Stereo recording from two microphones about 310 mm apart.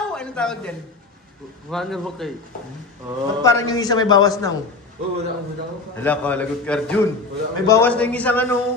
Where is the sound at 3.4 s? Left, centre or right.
Centre.